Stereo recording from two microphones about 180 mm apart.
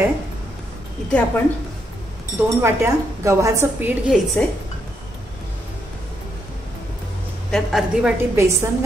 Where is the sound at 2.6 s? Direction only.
15° right (ahead or behind).